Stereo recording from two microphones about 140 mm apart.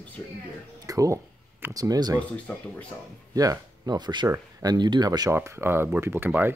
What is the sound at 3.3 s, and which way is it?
Speech, 25° right (ahead or behind).